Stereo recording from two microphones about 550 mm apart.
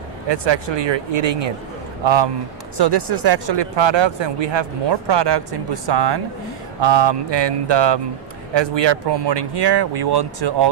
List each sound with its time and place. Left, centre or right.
0.3 s speech: right
2.8 s speech: right